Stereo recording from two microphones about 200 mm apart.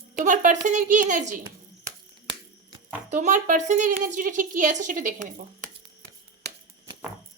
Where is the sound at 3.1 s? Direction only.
35° right (ahead or behind).